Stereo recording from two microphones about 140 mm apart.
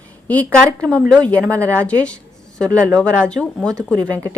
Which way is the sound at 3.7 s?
25° right (ahead or behind).